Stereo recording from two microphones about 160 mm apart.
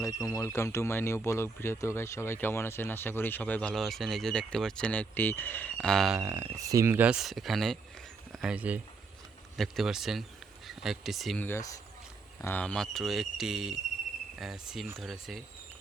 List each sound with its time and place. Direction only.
0.0 s speech: 20° left (ahead or behind); by 6.1 s centre (ahead or behind)
6.1 s speech: 10° right (ahead or behind)
11.4 s speech: 20° left (ahead or behind); by 15.4 s centre (ahead or behind)